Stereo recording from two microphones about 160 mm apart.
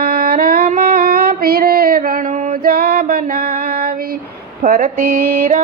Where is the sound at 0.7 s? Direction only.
65° right (ahead or behind).